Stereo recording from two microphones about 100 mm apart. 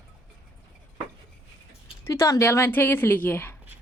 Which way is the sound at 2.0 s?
30° left (ahead or behind).